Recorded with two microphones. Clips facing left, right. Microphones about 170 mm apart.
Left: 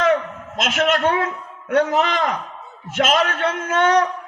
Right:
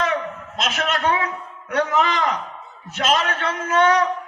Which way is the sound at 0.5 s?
50° left (ahead or behind).